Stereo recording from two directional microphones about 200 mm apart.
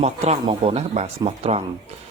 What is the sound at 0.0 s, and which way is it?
Speech, 30° right (ahead or behind).